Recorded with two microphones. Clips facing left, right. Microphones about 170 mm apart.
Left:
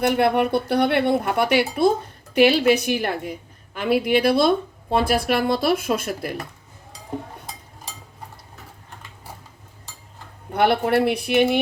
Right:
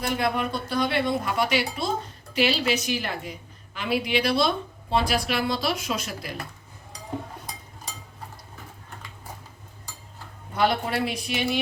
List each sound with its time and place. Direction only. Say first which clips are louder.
0.0 s a woman's voice: left 7 dB; 60° left (ahead or behind)
10.5 s speech: left 6 dB; 60° left (ahead or behind)